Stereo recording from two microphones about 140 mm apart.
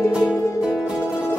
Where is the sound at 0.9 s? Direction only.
15° left (ahead or behind).